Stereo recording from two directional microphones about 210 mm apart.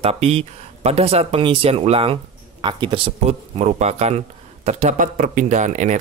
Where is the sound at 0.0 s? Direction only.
30° right (ahead or behind).